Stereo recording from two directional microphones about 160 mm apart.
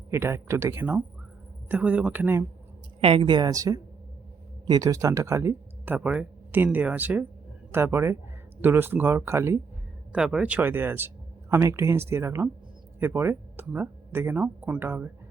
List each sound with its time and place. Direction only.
0.1 s speech: 15° right (ahead or behind)
3.0 s a woman's voice: 35° right (ahead or behind); by 15.1 s 10° right (ahead or behind)